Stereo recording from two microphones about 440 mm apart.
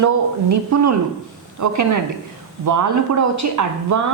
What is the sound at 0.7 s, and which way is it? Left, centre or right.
A woman's voice, right.